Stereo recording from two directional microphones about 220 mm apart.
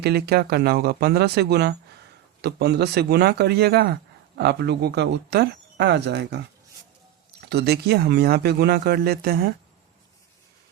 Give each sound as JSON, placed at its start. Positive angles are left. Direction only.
{"t": 0.0, "sound": "speech", "side_deg": -45}
{"t": 7.4, "sound": "speech", "side_deg": -50}